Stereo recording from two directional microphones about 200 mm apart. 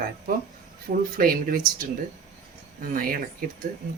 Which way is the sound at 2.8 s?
45° right (ahead or behind).